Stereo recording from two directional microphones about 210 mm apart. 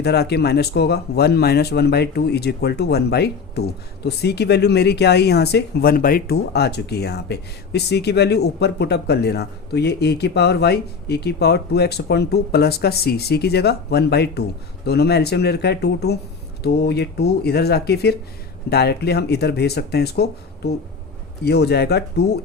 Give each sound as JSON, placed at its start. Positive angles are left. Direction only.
{"t": 0.0, "sound": "speech", "side_deg": 50}